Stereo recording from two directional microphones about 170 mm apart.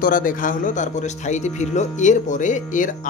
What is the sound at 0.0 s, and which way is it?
Speech, 55° left (ahead or behind).